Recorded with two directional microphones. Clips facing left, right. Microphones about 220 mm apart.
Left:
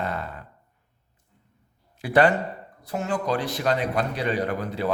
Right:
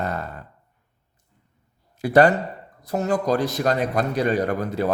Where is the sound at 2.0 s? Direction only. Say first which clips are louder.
Right 3 dB; 40° right (ahead or behind).